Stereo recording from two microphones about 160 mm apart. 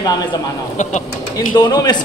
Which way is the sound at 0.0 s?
25° left (ahead or behind).